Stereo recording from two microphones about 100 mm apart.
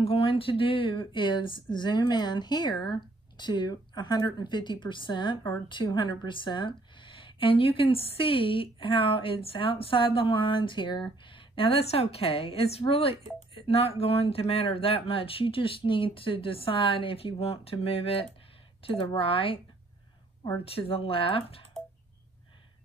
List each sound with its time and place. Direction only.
0.0 s speech: 70° left (ahead or behind)
18.8 s speech: 65° left (ahead or behind)
20.6 s speech: 75° left (ahead or behind)